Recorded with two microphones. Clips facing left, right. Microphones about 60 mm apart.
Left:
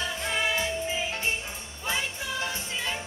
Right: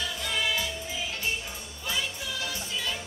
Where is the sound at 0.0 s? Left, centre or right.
Left.